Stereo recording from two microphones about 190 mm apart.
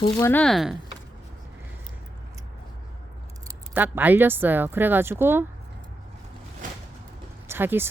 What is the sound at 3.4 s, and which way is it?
Speech, 10° right (ahead or behind).